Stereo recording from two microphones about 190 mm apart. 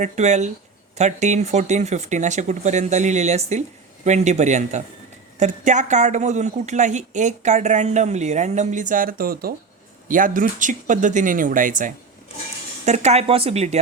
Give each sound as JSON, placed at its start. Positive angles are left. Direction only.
{"t": 0.0, "sound": "speech", "side_deg": -40}